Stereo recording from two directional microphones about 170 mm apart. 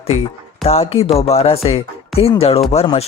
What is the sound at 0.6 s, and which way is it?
Speech, 35° left (ahead or behind).